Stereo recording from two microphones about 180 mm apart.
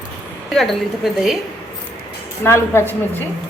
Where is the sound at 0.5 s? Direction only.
Centre (ahead or behind).